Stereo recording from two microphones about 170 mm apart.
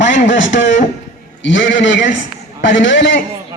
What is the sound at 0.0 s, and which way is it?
A man's voice, 90° left.